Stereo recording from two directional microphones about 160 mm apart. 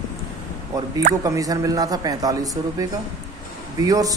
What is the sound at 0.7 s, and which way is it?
Speech, 20° right (ahead or behind).